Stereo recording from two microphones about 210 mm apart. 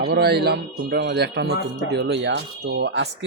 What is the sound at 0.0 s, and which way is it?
Speech, 50° right (ahead or behind).